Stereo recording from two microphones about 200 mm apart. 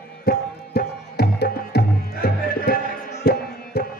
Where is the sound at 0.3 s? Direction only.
50° left (ahead or behind).